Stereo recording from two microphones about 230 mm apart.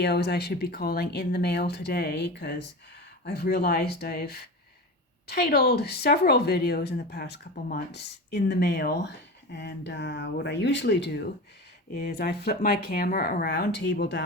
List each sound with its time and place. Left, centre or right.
0.0 s speech: left